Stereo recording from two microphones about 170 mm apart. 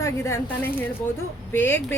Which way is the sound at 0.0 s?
15° left (ahead or behind).